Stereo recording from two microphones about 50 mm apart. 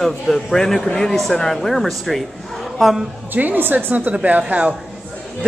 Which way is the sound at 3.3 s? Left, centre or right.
Right.